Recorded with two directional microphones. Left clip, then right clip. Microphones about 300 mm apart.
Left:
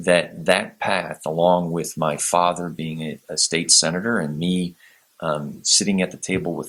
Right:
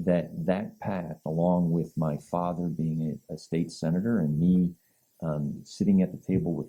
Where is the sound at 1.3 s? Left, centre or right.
Left.